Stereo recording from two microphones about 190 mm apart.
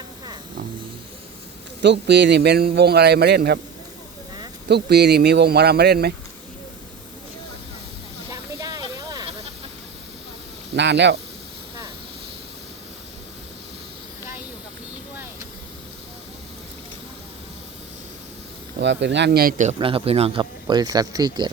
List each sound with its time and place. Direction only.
1.8 s a man's voice: 65° right (ahead or behind)
4.7 s a man's voice: 60° right (ahead or behind)
8.3 s hiss: 20° right (ahead or behind)
10.8 s a man's voice: 65° right (ahead or behind)
18.8 s a man's voice: 70° right (ahead or behind); by 19.7 s 45° right (ahead or behind)
19.8 s speech: 30° right (ahead or behind)